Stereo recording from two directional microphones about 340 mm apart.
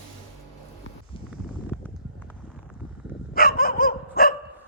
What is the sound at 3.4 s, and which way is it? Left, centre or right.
Dog, left.